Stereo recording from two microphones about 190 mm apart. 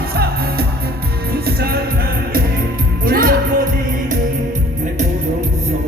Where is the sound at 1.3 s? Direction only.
55° right (ahead or behind).